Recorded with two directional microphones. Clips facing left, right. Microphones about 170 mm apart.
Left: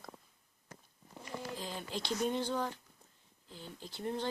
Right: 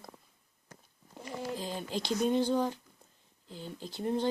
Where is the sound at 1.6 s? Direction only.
15° right (ahead or behind).